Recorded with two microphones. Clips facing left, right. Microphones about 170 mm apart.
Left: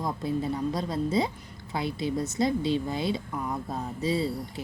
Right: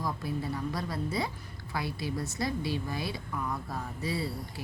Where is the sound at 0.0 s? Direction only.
20° left (ahead or behind).